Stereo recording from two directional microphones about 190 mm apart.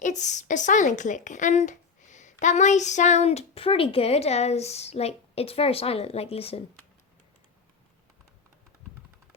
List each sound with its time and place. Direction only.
0.0 s a woman's voice: 40° left (ahead or behind)